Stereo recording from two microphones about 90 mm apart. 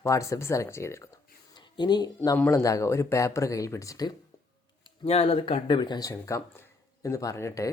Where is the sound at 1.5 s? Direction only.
55° left (ahead or behind); by 4.1 s 40° left (ahead or behind).